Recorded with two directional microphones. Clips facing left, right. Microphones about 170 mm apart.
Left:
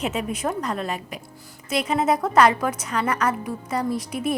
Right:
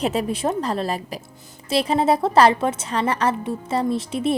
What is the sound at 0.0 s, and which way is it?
A woman's voice, 35° right (ahead or behind).